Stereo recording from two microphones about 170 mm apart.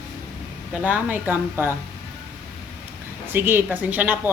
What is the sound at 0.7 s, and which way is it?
A woman's voice, 10° right (ahead or behind).